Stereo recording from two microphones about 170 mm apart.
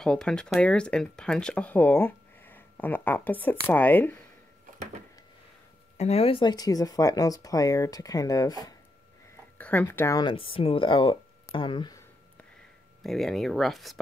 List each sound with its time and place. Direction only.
0.0 s speech: 5° left (ahead or behind)
5.9 s speech: 40° left (ahead or behind); by 8.7 s 20° left (ahead or behind)
9.6 s speech: 10° left (ahead or behind)
10.3 s speech: 30° left (ahead or behind)
13.0 s speech: centre (ahead or behind)